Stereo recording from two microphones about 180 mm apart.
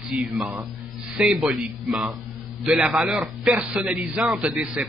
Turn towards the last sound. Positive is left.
turn(degrees=-5)  # may be behind; listen again after turning